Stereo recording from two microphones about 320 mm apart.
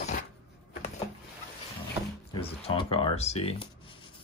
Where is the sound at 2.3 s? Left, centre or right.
Centre.